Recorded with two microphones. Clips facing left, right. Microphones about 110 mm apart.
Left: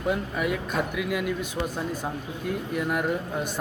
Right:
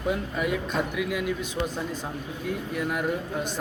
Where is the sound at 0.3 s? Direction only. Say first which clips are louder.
Even; 5° left (ahead or behind).